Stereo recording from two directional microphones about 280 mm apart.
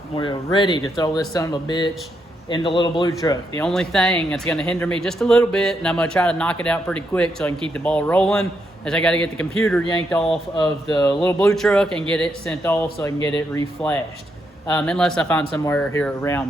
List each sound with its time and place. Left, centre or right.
0.2 s speech: centre
3.7 s speech: centre
10.2 s speech: centre